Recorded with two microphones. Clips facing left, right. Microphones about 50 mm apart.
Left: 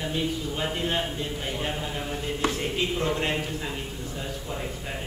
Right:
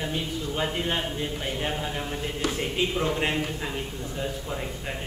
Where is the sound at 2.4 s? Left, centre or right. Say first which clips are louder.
Left 2 dB; left.